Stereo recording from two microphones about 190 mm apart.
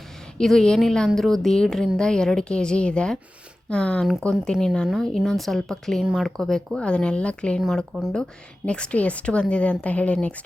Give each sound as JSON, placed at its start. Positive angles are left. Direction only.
{"t": 0.3, "sound": "a woman's voice", "side_deg": 5}